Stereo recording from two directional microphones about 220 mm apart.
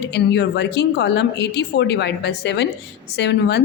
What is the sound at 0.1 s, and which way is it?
A woman's voice, 50° left (ahead or behind).